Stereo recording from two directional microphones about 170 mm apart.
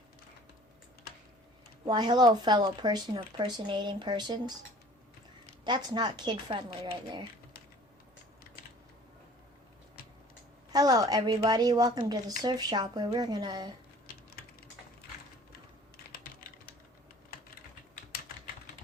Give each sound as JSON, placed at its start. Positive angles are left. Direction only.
{"t": 1.9, "sound": "speech", "side_deg": -25}
{"t": 5.6, "sound": "speech", "side_deg": -25}
{"t": 10.7, "sound": "speech", "side_deg": -20}